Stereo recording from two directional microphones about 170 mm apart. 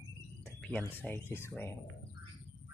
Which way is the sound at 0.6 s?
5° left (ahead or behind).